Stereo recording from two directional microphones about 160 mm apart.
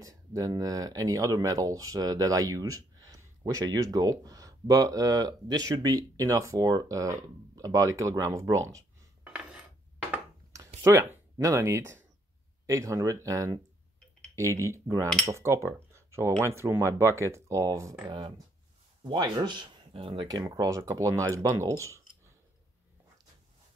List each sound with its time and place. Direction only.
0.0 s speech: 20° right (ahead or behind)
9.2 s cutlery: 5° right (ahead or behind)
10.1 s a sound: 20° right (ahead or behind)
10.8 s speech: 15° right (ahead or behind)
18.0 s speech: 30° right (ahead or behind)